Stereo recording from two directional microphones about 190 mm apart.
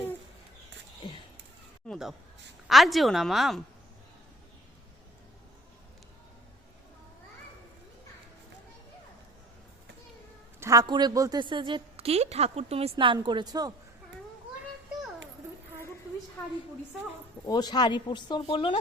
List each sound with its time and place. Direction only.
1.9 s a woman's voice: centre (ahead or behind)
10.6 s a woman's voice: 20° right (ahead or behind)
16.4 s a woman's voice: 10° left (ahead or behind); by 18.8 s 25° left (ahead or behind)